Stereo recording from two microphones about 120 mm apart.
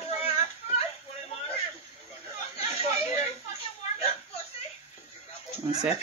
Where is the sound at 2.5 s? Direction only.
60° left (ahead or behind).